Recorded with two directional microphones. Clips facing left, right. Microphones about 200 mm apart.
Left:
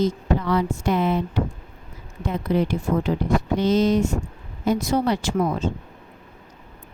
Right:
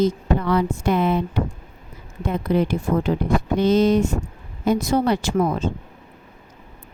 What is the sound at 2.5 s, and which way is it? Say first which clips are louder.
A woman's voice: right 1 dB; 55° right (ahead or behind).